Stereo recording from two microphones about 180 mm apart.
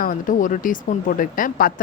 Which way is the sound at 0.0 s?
45° left (ahead or behind).